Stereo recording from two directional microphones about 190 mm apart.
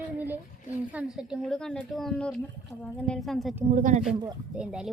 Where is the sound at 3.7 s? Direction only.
40° right (ahead or behind).